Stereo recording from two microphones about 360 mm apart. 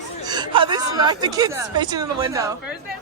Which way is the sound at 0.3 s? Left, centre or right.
Centre.